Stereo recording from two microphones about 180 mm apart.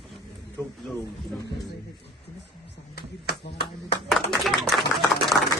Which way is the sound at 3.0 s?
65° left (ahead or behind).